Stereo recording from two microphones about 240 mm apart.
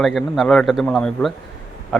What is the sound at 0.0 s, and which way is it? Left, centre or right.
A man's voice, centre.